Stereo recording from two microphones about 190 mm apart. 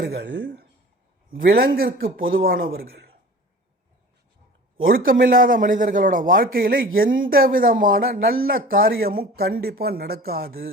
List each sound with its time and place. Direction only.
0.0 s speech: 60° right (ahead or behind)
1.3 s speech: 50° right (ahead or behind)
2.9 s a sound: 60° right (ahead or behind)
5.0 s speech: 50° right (ahead or behind)